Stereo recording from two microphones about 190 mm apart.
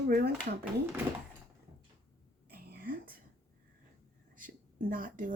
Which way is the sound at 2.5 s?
50° right (ahead or behind).